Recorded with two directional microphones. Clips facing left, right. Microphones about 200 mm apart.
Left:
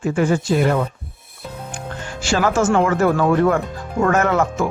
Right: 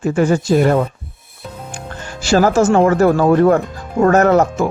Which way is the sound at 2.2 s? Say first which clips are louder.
Right 5 dB; 40° right (ahead or behind).